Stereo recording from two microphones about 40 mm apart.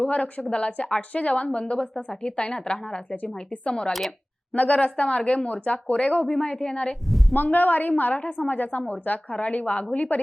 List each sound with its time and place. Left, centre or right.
0.0 s a woman's voice: left; by 3.2 s centre
3.3 s a woman's voice: left
7.3 s a woman's voice: left